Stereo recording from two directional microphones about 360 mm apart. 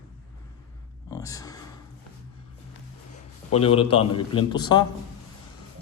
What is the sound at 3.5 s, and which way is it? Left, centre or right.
Speech, centre.